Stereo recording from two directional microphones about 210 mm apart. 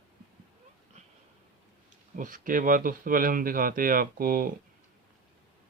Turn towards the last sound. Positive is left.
turn(degrees=-45)  # may be behind; listen again after turning